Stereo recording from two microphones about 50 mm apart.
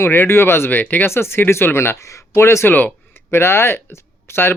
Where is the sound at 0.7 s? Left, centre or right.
Left.